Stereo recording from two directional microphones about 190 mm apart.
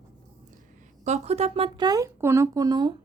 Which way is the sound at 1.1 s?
35° right (ahead or behind).